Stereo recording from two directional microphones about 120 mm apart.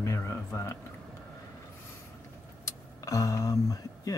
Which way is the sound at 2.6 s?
25° left (ahead or behind).